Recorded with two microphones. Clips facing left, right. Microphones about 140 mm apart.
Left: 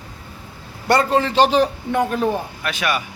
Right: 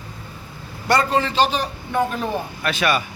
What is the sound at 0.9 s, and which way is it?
A man's voice, 55° left (ahead or behind).